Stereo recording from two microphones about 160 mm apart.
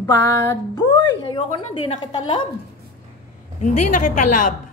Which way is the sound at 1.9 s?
30° left (ahead or behind).